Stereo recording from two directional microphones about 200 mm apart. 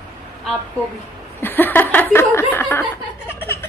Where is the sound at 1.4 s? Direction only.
10° left (ahead or behind).